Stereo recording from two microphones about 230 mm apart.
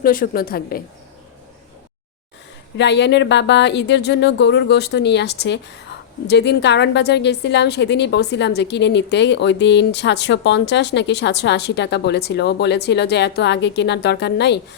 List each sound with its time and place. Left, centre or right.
0.0 s a woman's voice: left
2.7 s a woman's voice: left